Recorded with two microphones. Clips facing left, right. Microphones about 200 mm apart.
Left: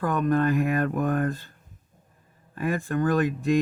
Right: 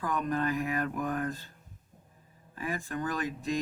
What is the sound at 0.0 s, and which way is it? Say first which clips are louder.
Speech: left 8 dB; 60° left (ahead or behind).